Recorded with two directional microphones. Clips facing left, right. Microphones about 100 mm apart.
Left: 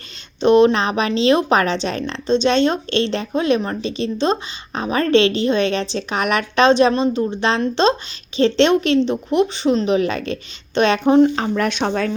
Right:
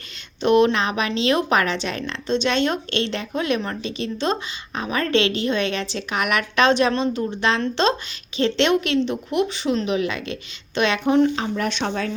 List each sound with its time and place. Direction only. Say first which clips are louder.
0.4 s a woman's voice: left 4 dB; 25° left (ahead or behind)
11.7 s speech: left 5 dB; 45° left (ahead or behind)